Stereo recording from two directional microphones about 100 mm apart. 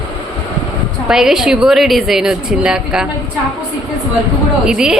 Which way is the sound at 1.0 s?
5° right (ahead or behind).